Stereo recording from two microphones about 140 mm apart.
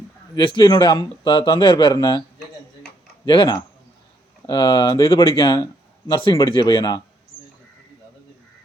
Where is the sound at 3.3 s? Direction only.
35° left (ahead or behind).